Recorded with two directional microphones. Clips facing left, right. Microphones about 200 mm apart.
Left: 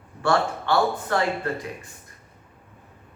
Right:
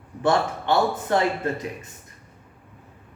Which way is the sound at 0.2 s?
20° right (ahead or behind).